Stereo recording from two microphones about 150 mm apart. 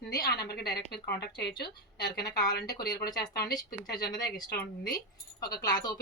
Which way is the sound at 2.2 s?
25° left (ahead or behind).